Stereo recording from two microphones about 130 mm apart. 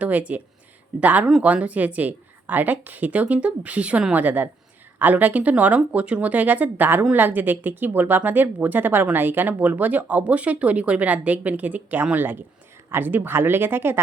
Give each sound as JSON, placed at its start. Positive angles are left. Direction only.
{"t": 0.0, "sound": "speech", "side_deg": -10}